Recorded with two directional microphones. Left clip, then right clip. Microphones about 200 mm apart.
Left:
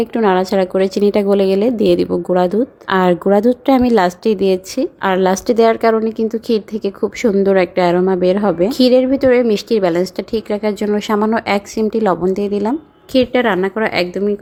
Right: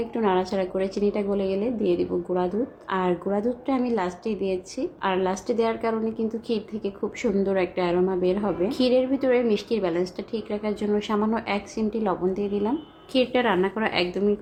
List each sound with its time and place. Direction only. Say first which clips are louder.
0.0 s a woman's voice: left 10 dB; 45° left (ahead or behind)